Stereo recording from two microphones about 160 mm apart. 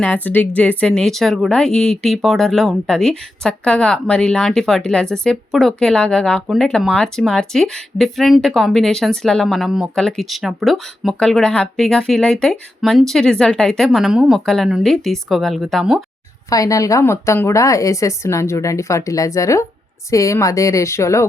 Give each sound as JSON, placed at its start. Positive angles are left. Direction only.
{"t": 0.0, "sound": "speech", "side_deg": 10}
{"t": 16.5, "sound": "a woman's voice", "side_deg": 20}